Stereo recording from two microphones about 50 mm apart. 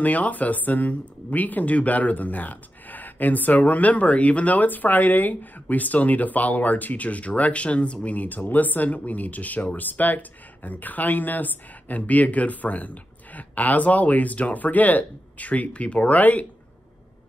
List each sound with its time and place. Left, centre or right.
0.0 s speech: left